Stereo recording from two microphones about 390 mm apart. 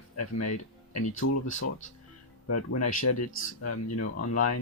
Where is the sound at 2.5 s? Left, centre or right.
Left.